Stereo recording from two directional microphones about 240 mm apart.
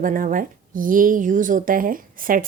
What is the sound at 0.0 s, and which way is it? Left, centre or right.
Speech, right.